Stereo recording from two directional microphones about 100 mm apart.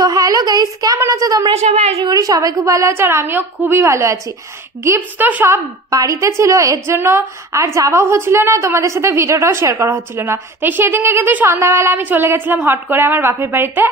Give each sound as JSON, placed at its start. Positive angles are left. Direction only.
{"t": 0.0, "sound": "a woman's voice", "side_deg": -40}
{"t": 1.5, "sound": "a woman's voice", "side_deg": -90}
{"t": 2.0, "sound": "a woman's voice", "side_deg": -35}
{"t": 5.9, "sound": "a woman's voice", "side_deg": -35}